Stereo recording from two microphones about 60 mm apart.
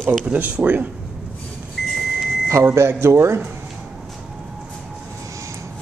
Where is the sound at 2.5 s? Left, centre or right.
Right.